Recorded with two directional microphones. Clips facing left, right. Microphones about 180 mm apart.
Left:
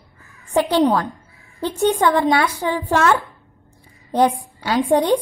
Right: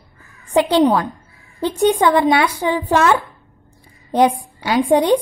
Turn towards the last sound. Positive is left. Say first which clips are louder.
# right 2 dB
turn(degrees=-15)  # may be behind; listen again after turning